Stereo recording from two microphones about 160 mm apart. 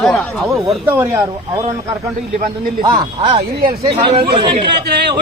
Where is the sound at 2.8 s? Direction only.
30° right (ahead or behind).